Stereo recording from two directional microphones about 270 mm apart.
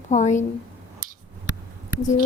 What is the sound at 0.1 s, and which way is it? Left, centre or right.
Speech, left.